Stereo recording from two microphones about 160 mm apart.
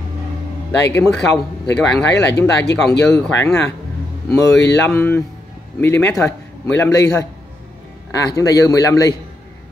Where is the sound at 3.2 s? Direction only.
10° left (ahead or behind).